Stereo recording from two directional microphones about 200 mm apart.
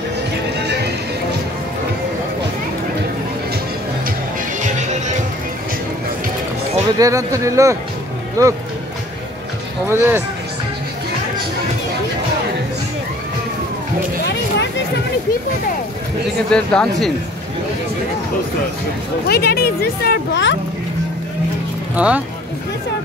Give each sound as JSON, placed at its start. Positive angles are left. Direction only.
{"t": 7.0, "sound": "speech", "side_deg": -15}
{"t": 9.8, "sound": "speech", "side_deg": -10}
{"t": 16.5, "sound": "speech", "side_deg": 5}
{"t": 19.2, "sound": "speech", "side_deg": 50}
{"t": 21.9, "sound": "speech", "side_deg": -5}